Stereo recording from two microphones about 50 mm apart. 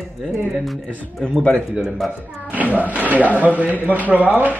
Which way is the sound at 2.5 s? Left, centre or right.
Right.